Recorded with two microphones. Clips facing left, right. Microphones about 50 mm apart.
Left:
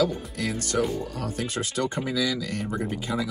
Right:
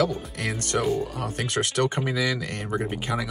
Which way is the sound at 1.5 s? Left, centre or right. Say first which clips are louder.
Right 6 dB; right.